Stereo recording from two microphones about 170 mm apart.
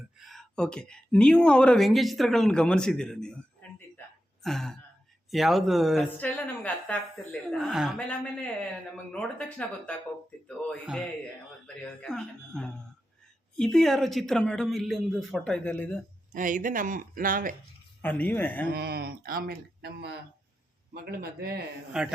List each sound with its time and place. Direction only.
0.2 s speech: centre (ahead or behind)
7.9 s speech: 10° left (ahead or behind)
10.7 s speech: 5° right (ahead or behind)
16.3 s speech: 50° right (ahead or behind)
18.0 s speech: 10° left (ahead or behind)
18.7 s speech: 70° right (ahead or behind)
22.0 s speech: 5° right (ahead or behind)